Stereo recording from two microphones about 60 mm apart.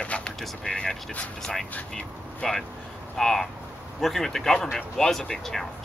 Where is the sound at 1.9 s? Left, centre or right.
Centre.